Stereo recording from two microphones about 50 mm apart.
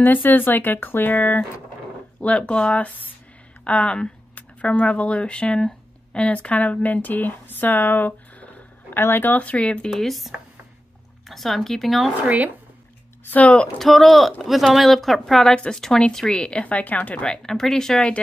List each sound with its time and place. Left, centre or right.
0.0 s speech: left
2.1 s speech: left
8.9 s speech: left
9.3 s speech: left
9.8 s speech: centre
13.3 s speech: left
13.7 s speech: centre; by 17.4 s left
17.4 s speech: centre